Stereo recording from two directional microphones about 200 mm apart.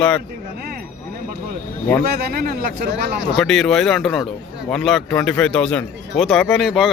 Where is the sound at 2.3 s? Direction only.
45° right (ahead or behind).